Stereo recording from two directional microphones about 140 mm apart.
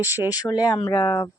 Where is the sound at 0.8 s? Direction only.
35° left (ahead or behind).